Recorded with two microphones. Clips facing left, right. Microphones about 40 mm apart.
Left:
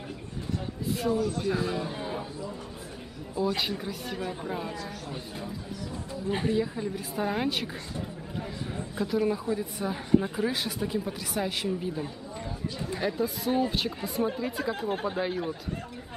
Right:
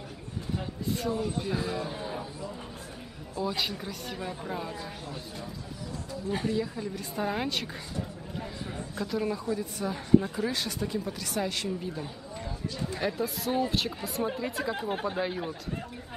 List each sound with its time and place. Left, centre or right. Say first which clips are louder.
1.1 s speech: left 3 dB; centre
1.4 s speech: left 3 dB; centre
3.4 s speech: left 2 dB; centre
6.2 s a woman's voice: left 3 dB; left
7.2 s speech: left 2 dB; centre
8.4 s a sound: left 2 dB; centre
9.5 s speech: left 1 dB; centre